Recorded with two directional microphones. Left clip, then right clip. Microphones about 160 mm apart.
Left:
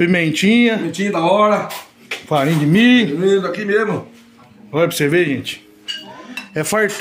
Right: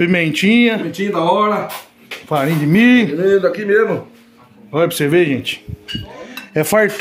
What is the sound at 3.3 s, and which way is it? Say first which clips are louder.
Speech: right 5 dB; 75° left (ahead or behind).